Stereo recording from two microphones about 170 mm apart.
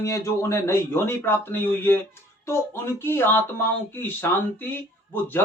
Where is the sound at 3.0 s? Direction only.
15° left (ahead or behind).